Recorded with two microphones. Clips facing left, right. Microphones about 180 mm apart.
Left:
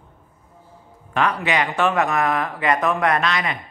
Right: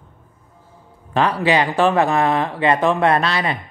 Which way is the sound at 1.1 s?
30° right (ahead or behind).